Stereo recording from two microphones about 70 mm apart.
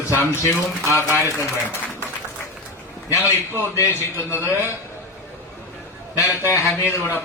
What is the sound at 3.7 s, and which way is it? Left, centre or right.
Speech, left.